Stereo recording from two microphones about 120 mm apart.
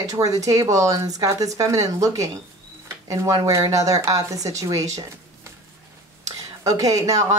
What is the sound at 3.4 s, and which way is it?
Speech, 30° right (ahead or behind).